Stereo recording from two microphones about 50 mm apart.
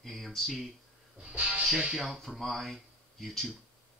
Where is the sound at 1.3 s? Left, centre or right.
Centre.